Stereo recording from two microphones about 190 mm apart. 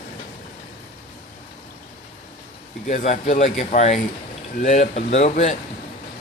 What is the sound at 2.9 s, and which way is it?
A man's voice, 45° left (ahead or behind).